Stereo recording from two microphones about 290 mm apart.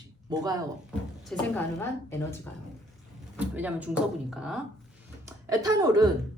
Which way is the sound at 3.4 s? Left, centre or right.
Centre.